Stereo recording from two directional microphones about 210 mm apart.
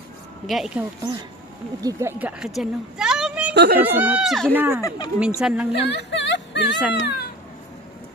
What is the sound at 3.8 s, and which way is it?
Speech, 10° right (ahead or behind).